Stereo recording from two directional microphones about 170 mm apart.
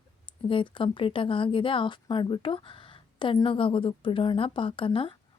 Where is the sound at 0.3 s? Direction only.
30° left (ahead or behind).